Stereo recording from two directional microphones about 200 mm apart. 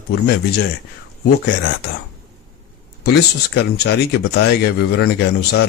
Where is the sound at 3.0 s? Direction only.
55° left (ahead or behind).